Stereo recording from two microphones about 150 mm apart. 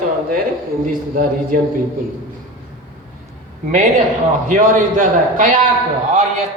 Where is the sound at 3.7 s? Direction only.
55° right (ahead or behind).